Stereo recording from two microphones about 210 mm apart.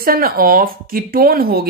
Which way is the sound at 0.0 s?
45° right (ahead or behind).